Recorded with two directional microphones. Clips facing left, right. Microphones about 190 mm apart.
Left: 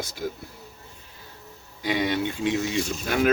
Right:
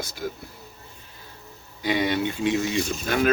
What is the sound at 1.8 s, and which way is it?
Speech, centre (ahead or behind).